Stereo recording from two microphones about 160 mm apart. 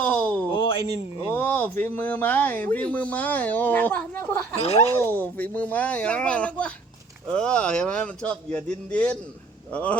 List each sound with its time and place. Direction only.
0.0 s a sound: 10° left (ahead or behind)
0.5 s speech: 30° left (ahead or behind)
1.3 s speech: 10° left (ahead or behind)
4.6 s speech: 40° left (ahead or behind)
4.9 s speech: 10° left (ahead or behind)